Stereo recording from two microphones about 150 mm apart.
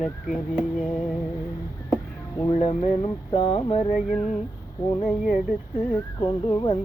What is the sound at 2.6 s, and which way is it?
Music, 40° left (ahead or behind).